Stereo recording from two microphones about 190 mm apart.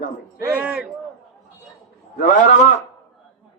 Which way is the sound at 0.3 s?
15° right (ahead or behind).